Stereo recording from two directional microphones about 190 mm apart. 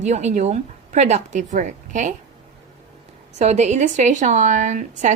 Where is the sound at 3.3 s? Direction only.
35° right (ahead or behind).